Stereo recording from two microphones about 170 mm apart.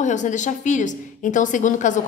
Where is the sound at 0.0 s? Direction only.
45° left (ahead or behind).